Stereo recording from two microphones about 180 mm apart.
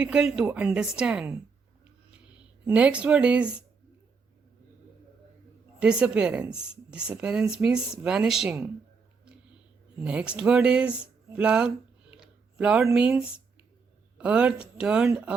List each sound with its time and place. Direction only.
0.0 s a woman's voice: 5° right (ahead or behind)
2.6 s speech: 10° right (ahead or behind)
5.8 s a woman's voice: 5° right (ahead or behind)
10.0 s a woman's voice: 5° right (ahead or behind)
12.2 s a sound: 5° right (ahead or behind)
12.9 s a woman's voice: 5° right (ahead or behind)